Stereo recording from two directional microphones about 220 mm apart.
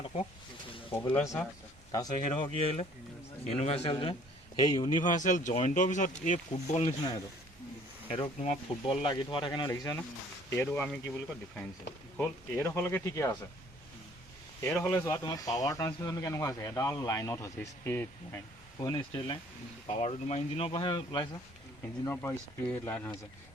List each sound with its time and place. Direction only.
1.1 s speech: 10° left (ahead or behind)
1.9 s speech: 20° left (ahead or behind)
8.1 s speech: 30° left (ahead or behind)
14.6 s speech: 15° left (ahead or behind)